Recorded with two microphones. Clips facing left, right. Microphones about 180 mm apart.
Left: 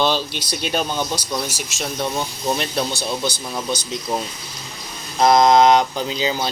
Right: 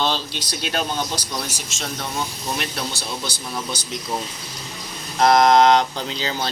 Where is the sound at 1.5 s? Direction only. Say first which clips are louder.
Left 4 dB; 10° left (ahead or behind).